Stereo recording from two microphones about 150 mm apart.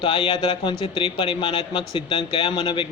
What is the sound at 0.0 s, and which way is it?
Speech, 35° left (ahead or behind).